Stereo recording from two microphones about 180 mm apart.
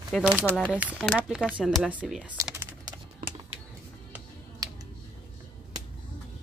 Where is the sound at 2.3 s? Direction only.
15° right (ahead or behind).